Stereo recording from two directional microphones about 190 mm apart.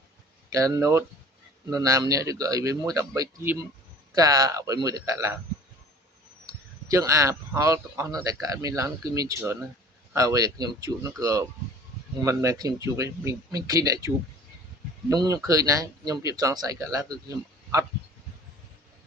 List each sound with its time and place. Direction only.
0.5 s speech: 15° right (ahead or behind)
6.4 s speech: 20° right (ahead or behind)
15.1 s speech: 20° right (ahead or behind)